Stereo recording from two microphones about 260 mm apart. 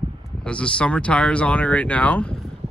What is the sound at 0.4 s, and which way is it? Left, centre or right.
Speech, centre.